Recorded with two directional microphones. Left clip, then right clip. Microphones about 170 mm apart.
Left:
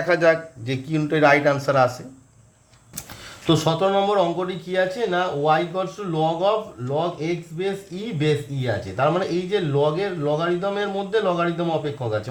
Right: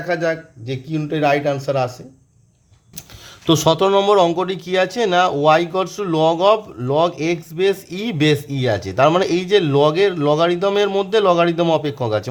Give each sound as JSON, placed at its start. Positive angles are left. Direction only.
{"t": 0.1, "sound": "a man's voice", "side_deg": -15}
{"t": 3.4, "sound": "speech", "side_deg": -45}